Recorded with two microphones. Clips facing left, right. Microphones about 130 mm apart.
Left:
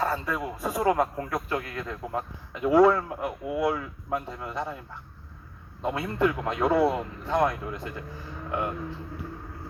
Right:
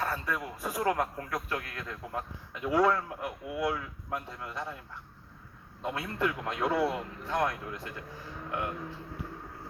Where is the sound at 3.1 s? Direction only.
40° left (ahead or behind).